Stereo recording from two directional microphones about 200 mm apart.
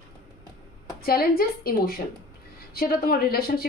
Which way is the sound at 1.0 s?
50° left (ahead or behind).